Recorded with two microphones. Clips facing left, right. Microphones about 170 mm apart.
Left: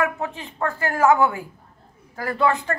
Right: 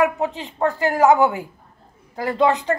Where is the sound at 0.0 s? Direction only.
20° right (ahead or behind).